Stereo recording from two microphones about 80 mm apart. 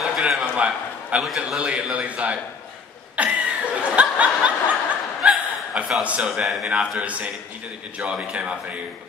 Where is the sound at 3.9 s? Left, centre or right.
Centre.